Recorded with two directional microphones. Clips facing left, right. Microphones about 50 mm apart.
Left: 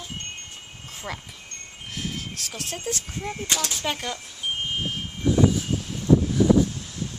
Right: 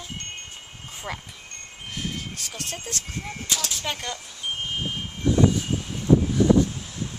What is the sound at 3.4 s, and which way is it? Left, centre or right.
Speech, left.